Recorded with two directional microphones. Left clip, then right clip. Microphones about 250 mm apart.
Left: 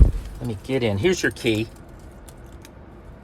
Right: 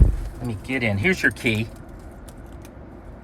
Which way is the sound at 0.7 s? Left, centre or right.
Centre.